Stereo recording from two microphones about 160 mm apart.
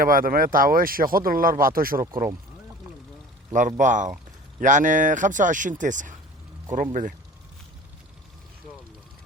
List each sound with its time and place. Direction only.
0.0 s speech: 60° right (ahead or behind)
3.5 s speech: 50° right (ahead or behind)